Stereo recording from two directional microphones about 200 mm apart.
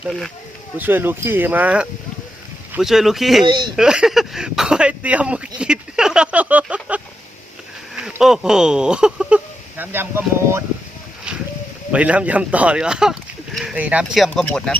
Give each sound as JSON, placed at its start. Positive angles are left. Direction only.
{"t": 0.0, "sound": "speech", "side_deg": 0}
{"t": 3.4, "sound": "speech", "side_deg": -25}
{"t": 3.8, "sound": "a sound", "side_deg": -5}
{"t": 7.9, "sound": "speech", "side_deg": 0}
{"t": 11.3, "sound": "a sound", "side_deg": -5}
{"t": 11.9, "sound": "speech", "side_deg": -5}